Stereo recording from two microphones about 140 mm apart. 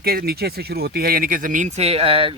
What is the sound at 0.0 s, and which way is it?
Speech, 90° right.